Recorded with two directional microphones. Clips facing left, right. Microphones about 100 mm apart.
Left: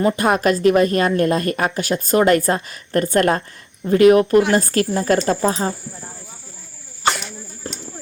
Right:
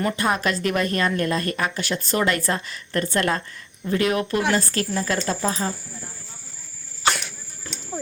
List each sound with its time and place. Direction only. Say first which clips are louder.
0.2 s a woman's voice: left 6 dB; 45° left (ahead or behind)
5.4 s speech: left 5 dB; 30° left (ahead or behind)
7.0 s sneeze: left 3 dB; 10° left (ahead or behind)